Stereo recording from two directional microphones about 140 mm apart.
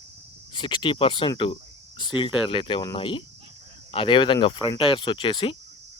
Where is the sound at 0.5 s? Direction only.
35° left (ahead or behind).